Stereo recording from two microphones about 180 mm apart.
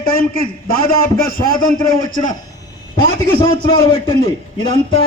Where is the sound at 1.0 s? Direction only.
50° left (ahead or behind).